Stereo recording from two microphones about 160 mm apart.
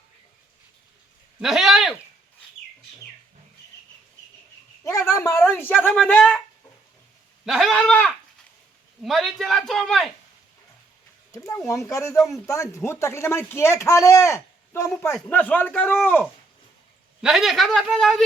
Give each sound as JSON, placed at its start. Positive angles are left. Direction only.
{"t": 1.4, "sound": "a sound", "side_deg": -5}
{"t": 4.8, "sound": "a sound", "side_deg": 20}
{"t": 5.1, "sound": "speech", "side_deg": 20}
{"t": 5.4, "sound": "speech", "side_deg": 10}
{"t": 7.4, "sound": "speech", "side_deg": 0}
{"t": 11.3, "sound": "speech", "side_deg": 15}
{"t": 17.2, "sound": "speech", "side_deg": -5}